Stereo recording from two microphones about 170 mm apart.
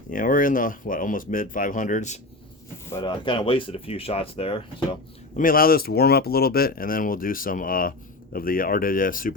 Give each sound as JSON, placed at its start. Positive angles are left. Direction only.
{"t": 0.1, "sound": "speech", "side_deg": 50}
{"t": 2.9, "sound": "speech", "side_deg": 30}
{"t": 5.4, "sound": "speech", "side_deg": 55}